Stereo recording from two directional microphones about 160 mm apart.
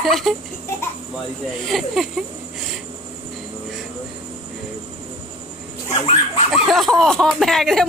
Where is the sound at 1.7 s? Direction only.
Centre (ahead or behind).